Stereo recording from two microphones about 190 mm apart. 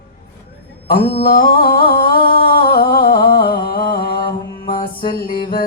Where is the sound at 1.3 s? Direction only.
50° left (ahead or behind).